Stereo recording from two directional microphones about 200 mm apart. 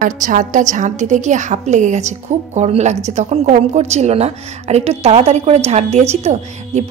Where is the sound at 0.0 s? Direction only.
40° right (ahead or behind).